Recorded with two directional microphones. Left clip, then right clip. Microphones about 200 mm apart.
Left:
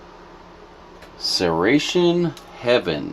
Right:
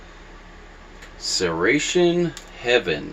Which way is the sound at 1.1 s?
50° left (ahead or behind).